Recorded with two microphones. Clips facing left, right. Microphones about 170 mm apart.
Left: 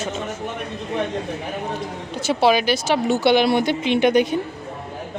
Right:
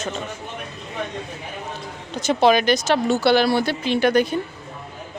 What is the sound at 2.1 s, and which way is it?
Speech, 10° left (ahead or behind).